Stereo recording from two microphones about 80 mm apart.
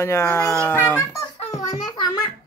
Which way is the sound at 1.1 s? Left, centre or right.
Left.